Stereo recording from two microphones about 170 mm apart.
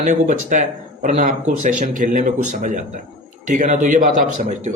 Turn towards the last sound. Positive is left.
turn(degrees=-50)  # may be behind; listen again after turning